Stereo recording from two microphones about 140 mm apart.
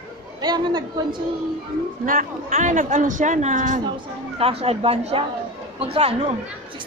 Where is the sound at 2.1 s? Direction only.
70° right (ahead or behind).